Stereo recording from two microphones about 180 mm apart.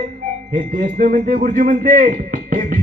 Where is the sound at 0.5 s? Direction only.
45° right (ahead or behind).